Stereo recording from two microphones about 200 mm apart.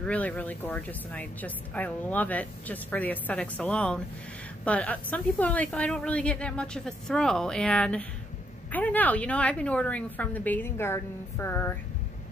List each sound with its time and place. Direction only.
0.0 s a woman's voice: 5° left (ahead or behind)